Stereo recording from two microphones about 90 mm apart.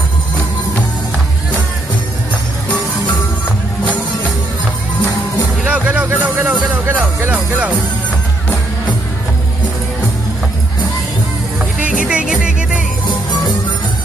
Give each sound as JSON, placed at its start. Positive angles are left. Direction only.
{"t": 5.7, "sound": "a sound", "side_deg": -15}
{"t": 6.7, "sound": "music", "side_deg": -20}
{"t": 11.8, "sound": "music", "side_deg": -10}